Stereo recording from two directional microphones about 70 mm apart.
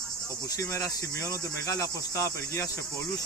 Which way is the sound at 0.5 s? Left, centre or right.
Left.